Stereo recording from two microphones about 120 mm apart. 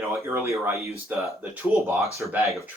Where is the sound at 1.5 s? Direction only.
10° right (ahead or behind).